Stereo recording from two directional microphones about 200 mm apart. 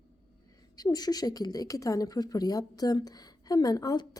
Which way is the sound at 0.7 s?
20° left (ahead or behind).